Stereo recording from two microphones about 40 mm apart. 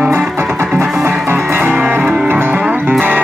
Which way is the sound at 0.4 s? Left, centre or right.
Right.